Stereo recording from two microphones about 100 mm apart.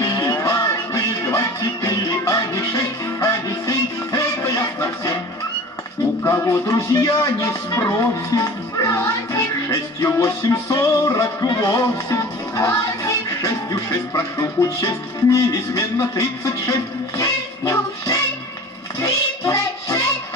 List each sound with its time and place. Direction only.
0.0 s music: 40° left (ahead or behind)
6.2 s speech: 30° left (ahead or behind)
11.4 s music: 35° left (ahead or behind)